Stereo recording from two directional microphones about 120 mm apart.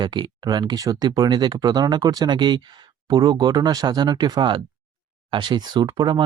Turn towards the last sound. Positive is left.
turn(degrees=-40)  # may be behind; listen again after turning